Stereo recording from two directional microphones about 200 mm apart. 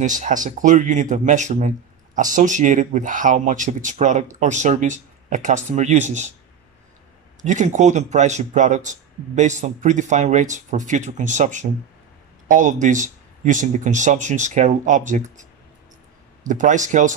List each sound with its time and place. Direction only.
0.0 s speech: 40° right (ahead or behind)
7.4 s speech: 40° right (ahead or behind)
16.4 s speech: 40° right (ahead or behind)